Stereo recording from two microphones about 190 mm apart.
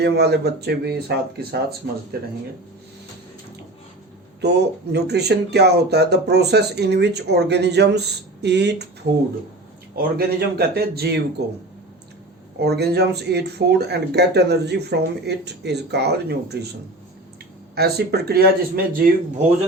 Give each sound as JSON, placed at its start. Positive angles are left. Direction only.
{"t": 0.0, "sound": "speech", "side_deg": -60}
{"t": 4.4, "sound": "speech", "side_deg": -60}
{"t": 9.9, "sound": "a man's voice", "side_deg": -50}
{"t": 12.5, "sound": "speech", "side_deg": -60}
{"t": 17.7, "sound": "speech", "side_deg": -55}